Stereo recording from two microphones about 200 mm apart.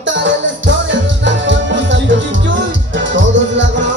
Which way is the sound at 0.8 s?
65° right (ahead or behind).